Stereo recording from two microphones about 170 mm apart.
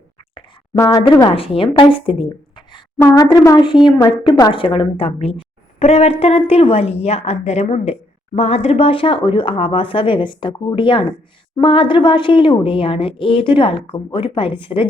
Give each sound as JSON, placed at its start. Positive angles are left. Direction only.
{"t": 0.8, "sound": "speech", "side_deg": 20}
{"t": 1.3, "sound": "speech", "side_deg": 35}
{"t": 3.0, "sound": "speech", "side_deg": 20}